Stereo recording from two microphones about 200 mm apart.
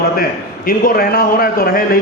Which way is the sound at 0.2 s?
45° left (ahead or behind).